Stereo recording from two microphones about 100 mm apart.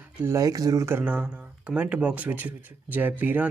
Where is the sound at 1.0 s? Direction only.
15° right (ahead or behind).